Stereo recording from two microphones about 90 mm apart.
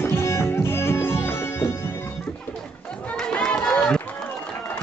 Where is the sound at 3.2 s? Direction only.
10° left (ahead or behind).